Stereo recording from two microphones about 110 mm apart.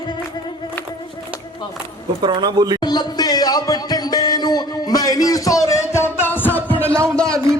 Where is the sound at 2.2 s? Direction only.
40° right (ahead or behind).